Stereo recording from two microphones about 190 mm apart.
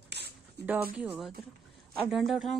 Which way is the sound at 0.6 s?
60° right (ahead or behind).